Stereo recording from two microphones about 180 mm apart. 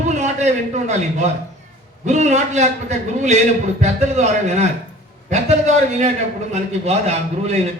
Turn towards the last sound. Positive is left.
turn(degrees=-35)  # may be behind; listen again after turning